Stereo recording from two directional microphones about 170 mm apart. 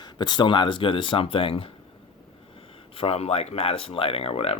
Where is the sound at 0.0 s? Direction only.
25° left (ahead or behind).